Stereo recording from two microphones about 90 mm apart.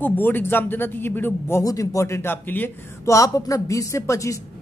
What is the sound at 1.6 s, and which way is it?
Speech, 40° left (ahead or behind).